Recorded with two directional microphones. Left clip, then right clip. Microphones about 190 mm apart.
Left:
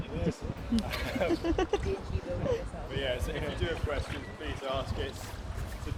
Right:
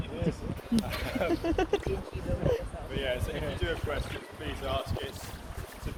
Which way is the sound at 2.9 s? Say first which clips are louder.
Right 1 dB; centre (ahead or behind).